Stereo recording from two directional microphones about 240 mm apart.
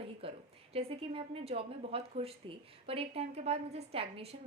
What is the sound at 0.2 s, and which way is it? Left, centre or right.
A woman's voice, right.